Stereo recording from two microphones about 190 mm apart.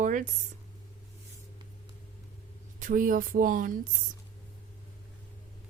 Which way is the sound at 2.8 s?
45° right (ahead or behind).